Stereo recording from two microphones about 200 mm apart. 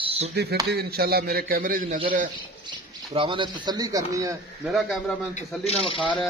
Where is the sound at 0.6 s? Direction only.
50° right (ahead or behind).